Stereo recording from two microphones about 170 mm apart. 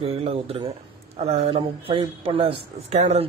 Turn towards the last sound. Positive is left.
turn(degrees=-40)  # may be behind; listen again after turning